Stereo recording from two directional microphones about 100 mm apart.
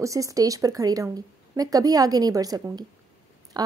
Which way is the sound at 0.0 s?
35° right (ahead or behind).